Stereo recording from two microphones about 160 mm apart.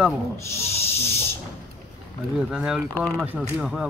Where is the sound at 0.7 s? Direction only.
40° left (ahead or behind).